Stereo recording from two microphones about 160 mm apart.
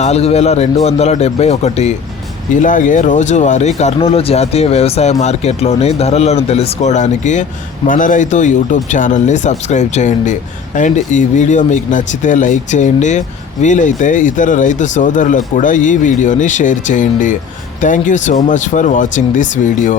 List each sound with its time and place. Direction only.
0.0 s speech: 40° left (ahead or behind)
2.6 s speech: 55° left (ahead or behind)